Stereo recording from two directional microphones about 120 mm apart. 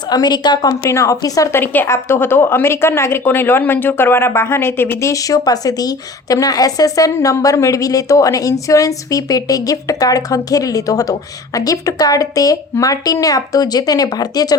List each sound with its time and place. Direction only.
0.1 s speech: 35° left (ahead or behind)
0.9 s a woman's voice: 25° left (ahead or behind)
1.6 s a woman's voice: 20° left (ahead or behind)